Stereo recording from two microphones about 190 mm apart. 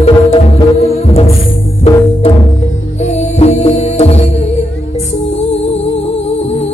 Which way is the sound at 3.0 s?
35° left (ahead or behind).